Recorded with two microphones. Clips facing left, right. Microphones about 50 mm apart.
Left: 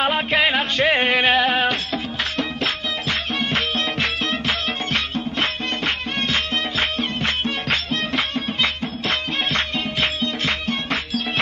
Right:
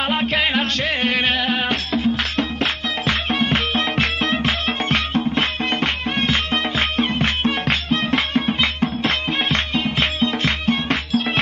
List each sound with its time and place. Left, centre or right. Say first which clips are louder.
0.0 s music: left 1 dB; centre
0.8 s music: left 3 dB; centre
2.3 s music: right 2 dB; right
7.0 s music: right 3 dB; right
9.0 s music: left 2 dB; right